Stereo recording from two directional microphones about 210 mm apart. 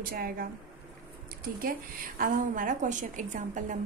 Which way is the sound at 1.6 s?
40° right (ahead or behind).